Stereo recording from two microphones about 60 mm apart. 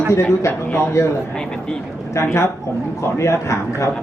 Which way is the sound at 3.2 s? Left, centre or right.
Left.